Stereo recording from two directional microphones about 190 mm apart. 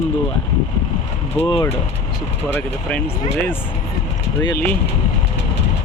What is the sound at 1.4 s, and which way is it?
Speech, 25° left (ahead or behind).